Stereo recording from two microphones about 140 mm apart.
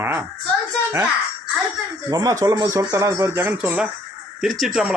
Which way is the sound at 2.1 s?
25° right (ahead or behind).